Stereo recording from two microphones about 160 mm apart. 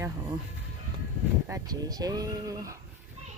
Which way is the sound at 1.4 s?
20° right (ahead or behind).